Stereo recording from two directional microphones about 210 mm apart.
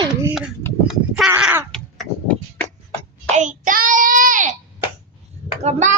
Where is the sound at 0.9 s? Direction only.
5° right (ahead or behind).